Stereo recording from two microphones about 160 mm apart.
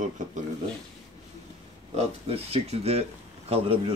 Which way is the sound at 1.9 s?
40° right (ahead or behind).